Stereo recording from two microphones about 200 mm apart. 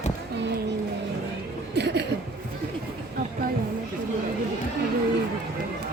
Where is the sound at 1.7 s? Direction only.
55° right (ahead or behind).